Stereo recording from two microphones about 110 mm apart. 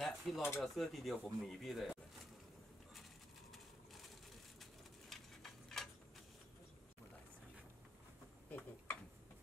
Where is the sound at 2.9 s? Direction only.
Centre (ahead or behind).